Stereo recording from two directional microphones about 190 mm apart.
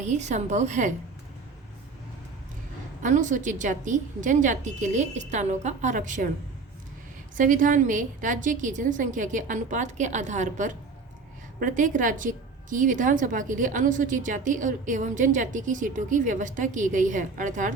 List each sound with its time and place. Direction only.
0.0 s a woman's voice: 40° right (ahead or behind)
3.0 s a woman's voice: 40° right (ahead or behind)
7.3 s a woman's voice: 45° right (ahead or behind)